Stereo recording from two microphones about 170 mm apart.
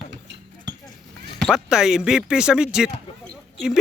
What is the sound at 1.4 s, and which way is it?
Speech, 5° right (ahead or behind).